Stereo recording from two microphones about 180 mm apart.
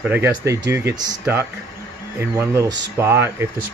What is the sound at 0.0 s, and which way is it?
Speech, 10° right (ahead or behind).